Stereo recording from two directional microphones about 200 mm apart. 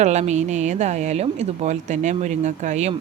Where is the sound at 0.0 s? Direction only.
35° right (ahead or behind).